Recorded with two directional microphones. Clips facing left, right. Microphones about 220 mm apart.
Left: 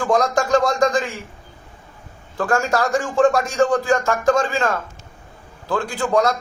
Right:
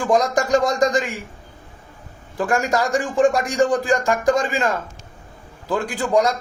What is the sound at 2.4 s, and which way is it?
A man's voice, 15° right (ahead or behind).